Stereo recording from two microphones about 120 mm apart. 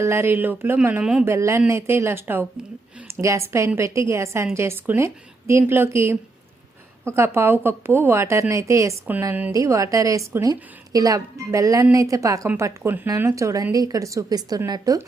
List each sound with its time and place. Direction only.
0.0 s a woman's voice: 20° right (ahead or behind)
1.2 s a woman's voice: 25° right (ahead or behind)